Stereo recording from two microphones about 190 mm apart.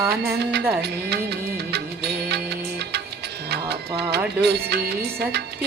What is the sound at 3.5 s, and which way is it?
Music, 60° right (ahead or behind).